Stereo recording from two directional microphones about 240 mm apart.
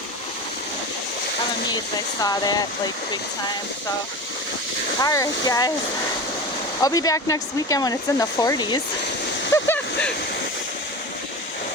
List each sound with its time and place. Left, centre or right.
2.2 s speech: centre
4.9 s speech: centre
6.8 s speech: centre
9.5 s a sound: centre